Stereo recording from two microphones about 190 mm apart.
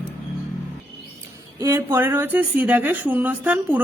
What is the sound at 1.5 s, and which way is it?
A woman's voice, 15° right (ahead or behind).